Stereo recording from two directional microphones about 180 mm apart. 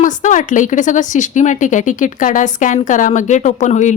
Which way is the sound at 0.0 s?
45° left (ahead or behind).